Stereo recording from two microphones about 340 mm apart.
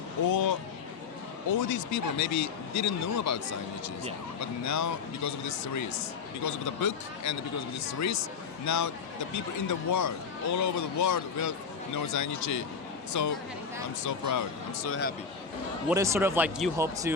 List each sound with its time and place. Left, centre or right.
0.3 s speech: left
1.5 s speech: left
15.9 s speech: centre